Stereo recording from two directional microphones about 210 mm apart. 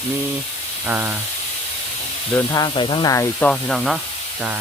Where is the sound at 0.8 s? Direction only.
10° right (ahead or behind).